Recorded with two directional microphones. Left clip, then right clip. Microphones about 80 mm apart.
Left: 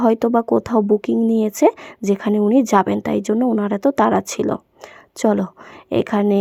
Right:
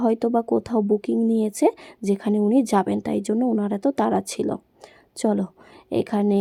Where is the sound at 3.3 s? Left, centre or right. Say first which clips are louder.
Left 4 dB; centre.